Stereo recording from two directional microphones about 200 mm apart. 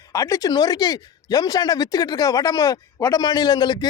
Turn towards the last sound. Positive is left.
turn(degrees=20)  # may be behind; listen again after turning